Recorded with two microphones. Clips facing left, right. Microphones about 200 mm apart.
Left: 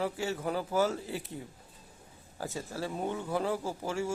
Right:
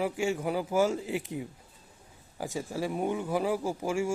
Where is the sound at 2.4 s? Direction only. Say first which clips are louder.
Right 4 dB; 15° right (ahead or behind).